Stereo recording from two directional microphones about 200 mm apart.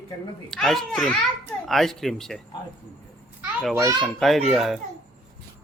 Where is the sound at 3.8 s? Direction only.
15° right (ahead or behind).